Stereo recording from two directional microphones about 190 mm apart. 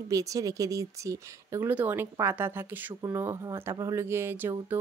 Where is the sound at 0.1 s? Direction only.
15° right (ahead or behind).